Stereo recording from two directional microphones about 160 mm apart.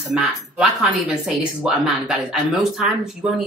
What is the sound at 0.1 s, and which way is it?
Speech, 5° right (ahead or behind).